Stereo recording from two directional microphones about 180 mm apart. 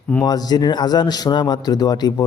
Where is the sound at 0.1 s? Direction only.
20° left (ahead or behind).